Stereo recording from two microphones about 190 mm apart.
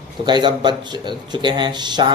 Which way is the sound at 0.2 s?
25° right (ahead or behind).